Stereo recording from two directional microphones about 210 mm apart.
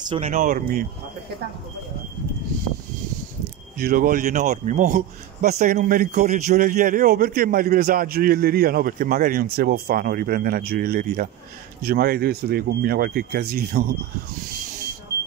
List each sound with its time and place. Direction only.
0.1 s speech: 35° right (ahead or behind)
3.7 s a man's voice: 45° right (ahead or behind)